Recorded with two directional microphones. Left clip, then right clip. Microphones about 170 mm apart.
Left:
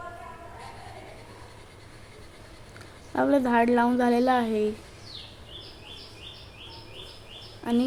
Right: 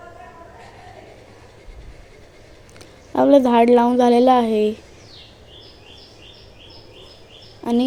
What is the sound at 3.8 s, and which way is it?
Speech, 15° right (ahead or behind).